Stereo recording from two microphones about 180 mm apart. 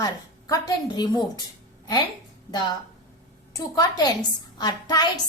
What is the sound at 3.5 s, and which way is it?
A woman's voice, 20° left (ahead or behind).